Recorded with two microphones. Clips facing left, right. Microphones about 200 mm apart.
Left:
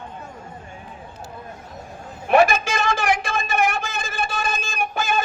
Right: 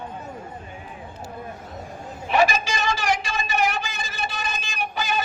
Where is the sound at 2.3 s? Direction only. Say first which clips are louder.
Left 4 dB; 55° left (ahead or behind).